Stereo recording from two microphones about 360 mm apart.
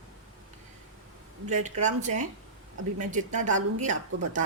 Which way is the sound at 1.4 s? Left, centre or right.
Centre.